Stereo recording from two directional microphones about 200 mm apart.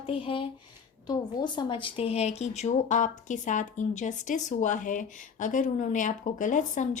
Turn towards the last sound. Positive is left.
turn(degrees=40)  # may be behind; listen again after turning